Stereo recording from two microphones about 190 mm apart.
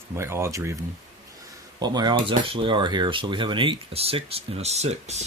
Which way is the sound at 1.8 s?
20° right (ahead or behind).